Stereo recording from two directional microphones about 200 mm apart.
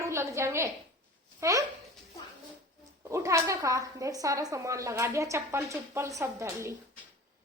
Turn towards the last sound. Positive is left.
turn(degrees=-15)  # may be behind; listen again after turning